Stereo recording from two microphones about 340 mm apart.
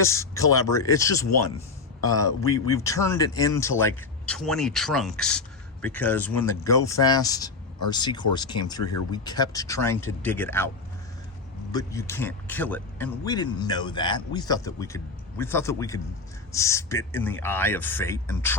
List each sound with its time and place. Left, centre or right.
0.0 s a man's voice: centre
11.7 s a man's voice: centre